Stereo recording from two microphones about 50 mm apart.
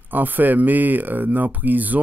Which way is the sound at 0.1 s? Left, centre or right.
Right.